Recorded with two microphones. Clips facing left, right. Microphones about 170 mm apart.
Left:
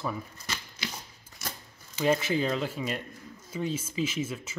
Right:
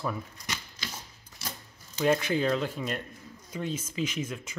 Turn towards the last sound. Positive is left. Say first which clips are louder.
# left 2 dB
turn(degrees=5)  # may be behind; listen again after turning